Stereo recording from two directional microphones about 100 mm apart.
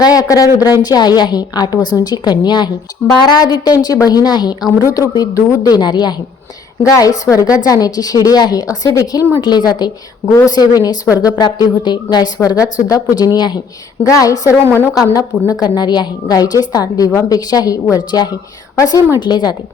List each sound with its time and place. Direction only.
0.0 s a woman's voice: 40° left (ahead or behind)
19.2 s a woman's voice: 45° left (ahead or behind)